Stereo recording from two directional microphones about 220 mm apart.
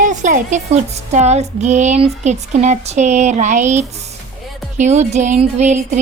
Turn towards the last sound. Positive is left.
turn(degrees=-30)  # may be behind; listen again after turning